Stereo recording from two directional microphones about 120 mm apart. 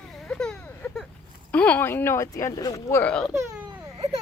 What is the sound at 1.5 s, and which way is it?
Speech, 10° left (ahead or behind).